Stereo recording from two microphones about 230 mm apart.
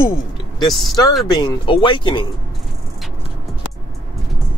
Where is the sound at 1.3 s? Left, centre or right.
Centre.